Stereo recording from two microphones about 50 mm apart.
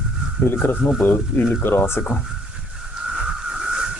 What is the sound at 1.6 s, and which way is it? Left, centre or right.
Speech, left.